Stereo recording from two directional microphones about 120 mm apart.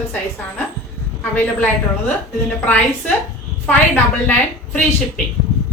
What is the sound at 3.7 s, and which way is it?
A woman's voice, 15° left (ahead or behind).